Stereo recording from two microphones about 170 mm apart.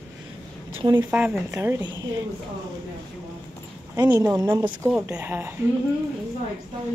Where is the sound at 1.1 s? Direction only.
10° right (ahead or behind).